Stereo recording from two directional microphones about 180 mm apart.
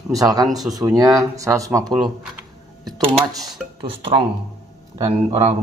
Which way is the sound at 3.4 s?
Centre (ahead or behind).